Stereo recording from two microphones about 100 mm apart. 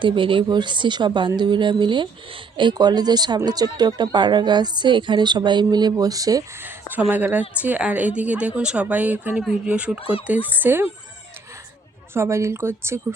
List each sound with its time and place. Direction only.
0.0 s speech: 55° right (ahead or behind); by 6.4 s 35° right (ahead or behind)
6.6 s a woman's voice: 20° right (ahead or behind)
12.1 s speech: 25° right (ahead or behind)